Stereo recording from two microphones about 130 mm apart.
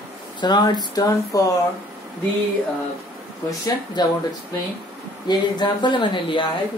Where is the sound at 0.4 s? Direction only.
35° left (ahead or behind).